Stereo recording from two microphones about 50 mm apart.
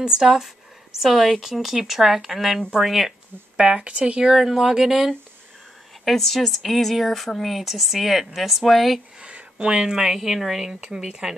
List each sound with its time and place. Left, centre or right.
0.0 s speech: centre
3.5 s speech: centre
6.0 s speech: centre
9.2 s a sound: right
9.9 s speech: centre